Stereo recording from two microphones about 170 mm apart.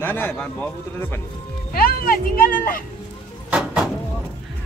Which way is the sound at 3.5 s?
5° right (ahead or behind).